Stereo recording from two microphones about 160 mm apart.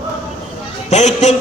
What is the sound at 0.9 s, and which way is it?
Speech, 45° left (ahead or behind).